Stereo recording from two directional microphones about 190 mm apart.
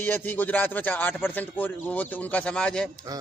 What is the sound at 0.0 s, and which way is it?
Speech, 10° left (ahead or behind).